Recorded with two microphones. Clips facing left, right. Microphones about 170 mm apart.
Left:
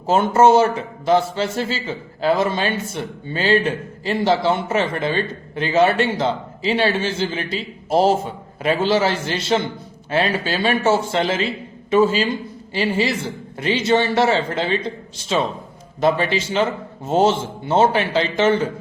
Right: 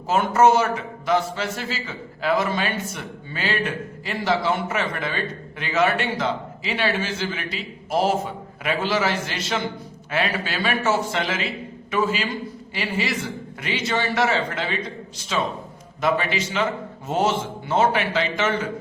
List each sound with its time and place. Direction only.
0.1 s a man's voice: 30° left (ahead or behind)
16.0 s a man's voice: 30° left (ahead or behind)